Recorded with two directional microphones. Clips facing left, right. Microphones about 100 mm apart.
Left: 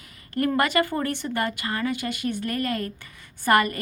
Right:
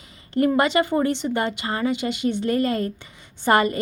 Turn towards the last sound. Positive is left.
turn(degrees=-25)  # may be behind; listen again after turning